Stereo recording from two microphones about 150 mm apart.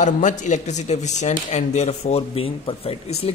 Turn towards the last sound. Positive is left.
turn(degrees=40)  # may be behind; listen again after turning